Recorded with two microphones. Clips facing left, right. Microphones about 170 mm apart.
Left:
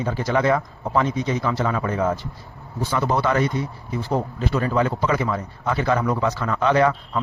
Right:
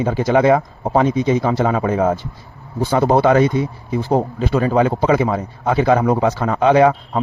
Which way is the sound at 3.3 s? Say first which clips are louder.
Right 7 dB; 20° right (ahead or behind).